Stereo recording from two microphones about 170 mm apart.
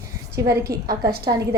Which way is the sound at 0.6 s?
65° right (ahead or behind).